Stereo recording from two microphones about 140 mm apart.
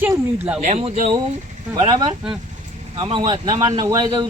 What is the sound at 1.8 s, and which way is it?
Speech, 30° right (ahead or behind).